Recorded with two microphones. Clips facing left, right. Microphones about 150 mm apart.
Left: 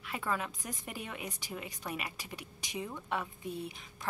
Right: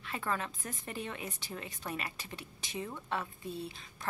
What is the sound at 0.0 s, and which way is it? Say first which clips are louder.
A woman's voice: even; 10° left (ahead or behind).